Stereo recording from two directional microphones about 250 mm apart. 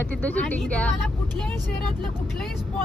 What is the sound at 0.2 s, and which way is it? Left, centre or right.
Speech, centre.